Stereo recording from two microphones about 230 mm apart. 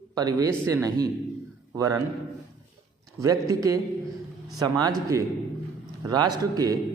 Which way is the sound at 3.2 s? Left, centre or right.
Centre.